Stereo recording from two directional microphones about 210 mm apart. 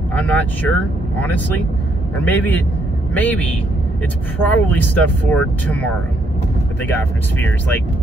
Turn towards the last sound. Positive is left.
turn(degrees=10)  # may be behind; listen again after turning